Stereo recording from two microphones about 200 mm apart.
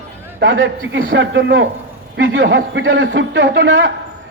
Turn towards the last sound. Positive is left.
turn(degrees=-65)  # may be behind; listen again after turning